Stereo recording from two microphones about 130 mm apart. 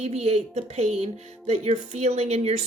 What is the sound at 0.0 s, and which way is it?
Speech, 55° right (ahead or behind).